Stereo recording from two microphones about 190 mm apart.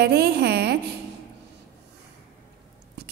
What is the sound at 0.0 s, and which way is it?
Speech, 55° right (ahead or behind).